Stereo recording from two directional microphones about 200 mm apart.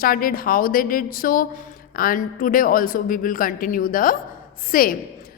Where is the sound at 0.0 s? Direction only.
45° left (ahead or behind).